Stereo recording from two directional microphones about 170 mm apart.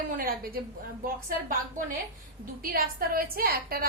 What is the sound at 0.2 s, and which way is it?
Speech, 60° right (ahead or behind).